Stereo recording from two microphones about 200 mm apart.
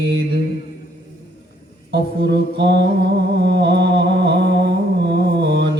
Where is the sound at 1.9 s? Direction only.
55° right (ahead or behind).